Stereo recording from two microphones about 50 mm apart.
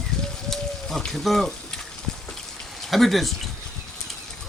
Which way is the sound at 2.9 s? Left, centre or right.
Centre.